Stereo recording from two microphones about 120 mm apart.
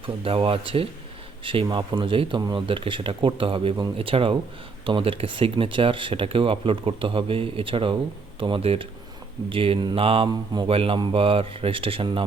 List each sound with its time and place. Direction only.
0.0 s speech: 50° right (ahead or behind)